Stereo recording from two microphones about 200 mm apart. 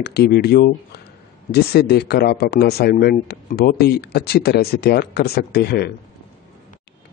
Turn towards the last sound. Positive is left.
turn(degrees=55)  # may be behind; listen again after turning